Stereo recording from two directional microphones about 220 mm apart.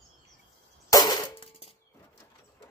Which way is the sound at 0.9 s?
15° left (ahead or behind).